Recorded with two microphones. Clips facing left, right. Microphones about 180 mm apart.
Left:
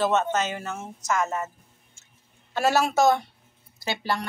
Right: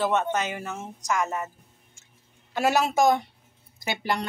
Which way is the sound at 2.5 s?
15° right (ahead or behind).